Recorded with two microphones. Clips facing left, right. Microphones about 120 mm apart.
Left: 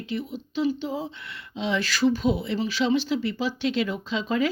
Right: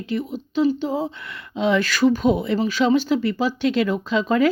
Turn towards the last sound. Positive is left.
turn(degrees=-50)  # may be behind; listen again after turning